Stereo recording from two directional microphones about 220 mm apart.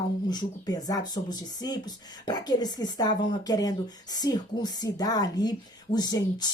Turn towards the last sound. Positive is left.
turn(degrees=20)  # may be behind; listen again after turning